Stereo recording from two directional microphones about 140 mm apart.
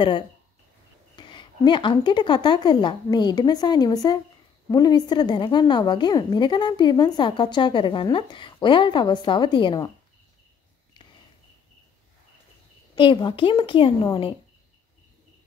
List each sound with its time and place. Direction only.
1.1 s a woman's voice: 35° left (ahead or behind)
12.9 s a woman's voice: 35° left (ahead or behind)